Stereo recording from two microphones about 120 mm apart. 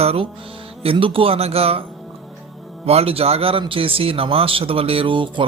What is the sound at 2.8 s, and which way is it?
Speech, 55° right (ahead or behind).